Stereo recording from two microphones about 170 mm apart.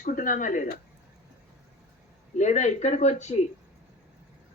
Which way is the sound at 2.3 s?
45° left (ahead or behind).